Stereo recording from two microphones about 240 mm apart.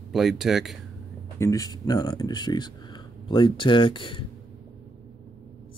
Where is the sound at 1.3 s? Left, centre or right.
Centre.